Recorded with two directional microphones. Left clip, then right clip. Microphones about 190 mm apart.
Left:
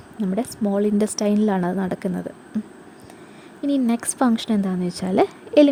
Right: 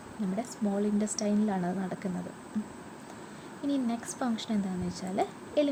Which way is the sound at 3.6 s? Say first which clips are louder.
Left 10 dB; 60° left (ahead or behind).